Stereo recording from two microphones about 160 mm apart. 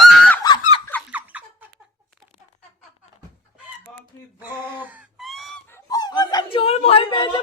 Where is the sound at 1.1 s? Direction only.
10° right (ahead or behind).